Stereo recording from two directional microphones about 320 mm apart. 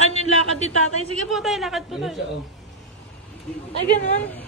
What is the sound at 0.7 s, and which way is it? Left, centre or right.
Speech, right.